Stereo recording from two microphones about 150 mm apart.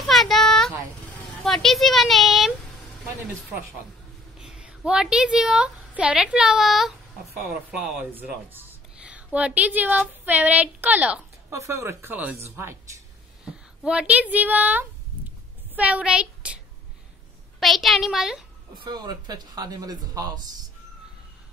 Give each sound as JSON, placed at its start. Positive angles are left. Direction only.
{"t": 0.0, "sound": "a sound", "side_deg": 0}
{"t": 1.4, "sound": "speech", "side_deg": 5}
{"t": 4.4, "sound": "a woman's voice", "side_deg": -5}
{"t": 17.6, "sound": "speech", "side_deg": 0}
{"t": 18.9, "sound": "speech", "side_deg": -25}